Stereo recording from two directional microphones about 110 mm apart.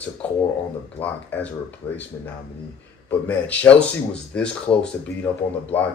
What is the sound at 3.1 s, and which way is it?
Speech, 15° left (ahead or behind).